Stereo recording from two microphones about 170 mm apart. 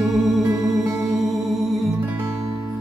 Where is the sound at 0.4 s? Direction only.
20° right (ahead or behind).